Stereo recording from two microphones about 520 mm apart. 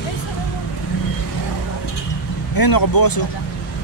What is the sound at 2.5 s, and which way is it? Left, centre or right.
Speech, left.